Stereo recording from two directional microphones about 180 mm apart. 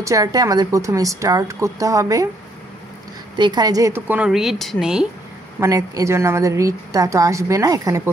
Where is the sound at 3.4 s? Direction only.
25° right (ahead or behind); by 5.0 s 5° right (ahead or behind).